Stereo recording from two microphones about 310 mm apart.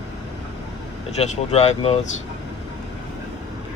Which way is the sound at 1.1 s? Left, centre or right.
Centre.